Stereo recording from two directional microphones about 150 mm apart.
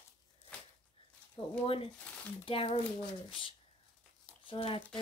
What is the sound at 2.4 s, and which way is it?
A woman's voice, 40° left (ahead or behind).